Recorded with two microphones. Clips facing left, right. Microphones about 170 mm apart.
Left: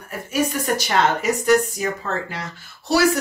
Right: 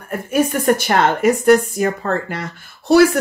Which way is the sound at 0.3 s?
55° right (ahead or behind).